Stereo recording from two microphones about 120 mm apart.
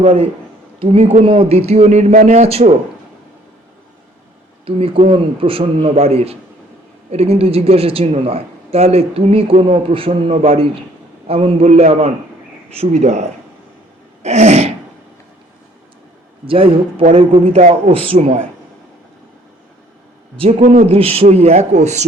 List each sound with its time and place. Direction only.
0.0 s a woman's voice: 60° right (ahead or behind)
4.6 s a man's voice: 50° right (ahead or behind); by 13.2 s 70° right (ahead or behind)
14.2 s sneeze: 65° right (ahead or behind)
16.5 s a man's voice: 50° right (ahead or behind)
17.6 s a woman's voice: 65° right (ahead or behind)
20.3 s a man's voice: 50° right (ahead or behind)
20.6 s speech: 80° right
20.9 s speech: 55° right (ahead or behind); by 22.0 s 70° right (ahead or behind)